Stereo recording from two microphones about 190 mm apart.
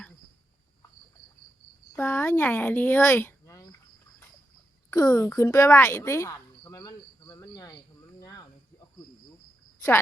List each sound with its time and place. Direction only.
1.9 s speech: 10° left (ahead or behind)
4.9 s speech: 20° left (ahead or behind)